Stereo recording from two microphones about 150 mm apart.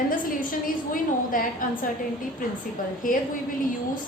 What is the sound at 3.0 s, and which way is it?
Speech, 65° left (ahead or behind).